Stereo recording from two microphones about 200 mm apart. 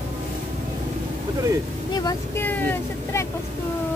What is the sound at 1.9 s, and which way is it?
Speech, 15° left (ahead or behind).